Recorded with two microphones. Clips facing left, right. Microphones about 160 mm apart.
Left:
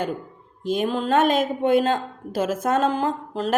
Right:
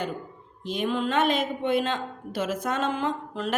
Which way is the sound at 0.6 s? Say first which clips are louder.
Left 4 dB; 45° left (ahead or behind).